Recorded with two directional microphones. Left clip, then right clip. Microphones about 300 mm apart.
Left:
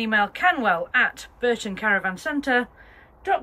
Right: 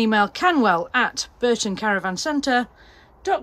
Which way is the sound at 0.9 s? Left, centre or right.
Centre.